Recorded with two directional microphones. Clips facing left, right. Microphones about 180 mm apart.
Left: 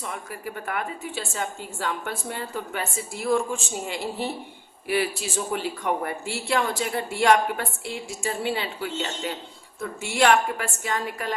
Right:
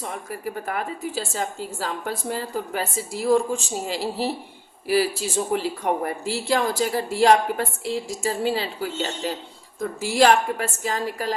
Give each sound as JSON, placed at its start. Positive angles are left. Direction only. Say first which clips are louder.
{"t": 0.0, "sound": "speech", "louder": "right 3 dB", "side_deg": -35}